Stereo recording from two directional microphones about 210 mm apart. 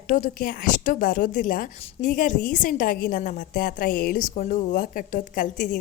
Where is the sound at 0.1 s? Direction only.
40° left (ahead or behind).